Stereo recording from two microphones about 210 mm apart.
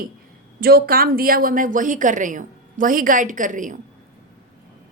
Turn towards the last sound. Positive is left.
turn(degrees=-40)  # may be behind; listen again after turning